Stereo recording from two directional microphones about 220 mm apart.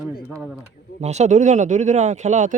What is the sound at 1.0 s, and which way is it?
Speech, 30° right (ahead or behind).